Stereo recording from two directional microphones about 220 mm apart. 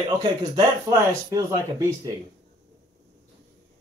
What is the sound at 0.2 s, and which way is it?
Speech, 20° right (ahead or behind).